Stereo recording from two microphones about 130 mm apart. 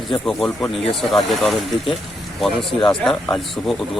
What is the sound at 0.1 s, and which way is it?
Speech, centre (ahead or behind).